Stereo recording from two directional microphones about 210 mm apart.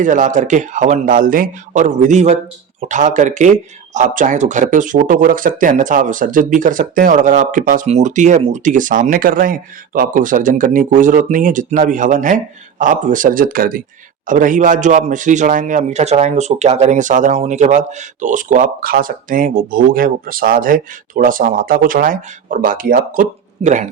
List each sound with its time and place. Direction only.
0.0 s speech: 35° right (ahead or behind)